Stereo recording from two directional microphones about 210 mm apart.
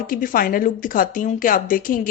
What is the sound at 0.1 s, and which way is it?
A woman's voice, 40° left (ahead or behind).